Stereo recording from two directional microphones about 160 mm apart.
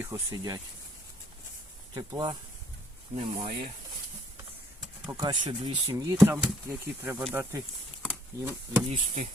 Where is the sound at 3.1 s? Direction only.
40° right (ahead or behind).